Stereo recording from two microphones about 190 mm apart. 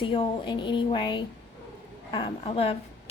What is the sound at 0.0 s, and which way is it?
A woman's voice, 25° left (ahead or behind).